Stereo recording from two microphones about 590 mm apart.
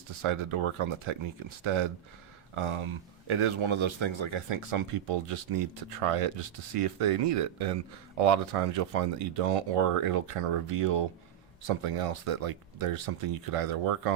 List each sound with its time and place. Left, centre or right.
0.2 s speech: right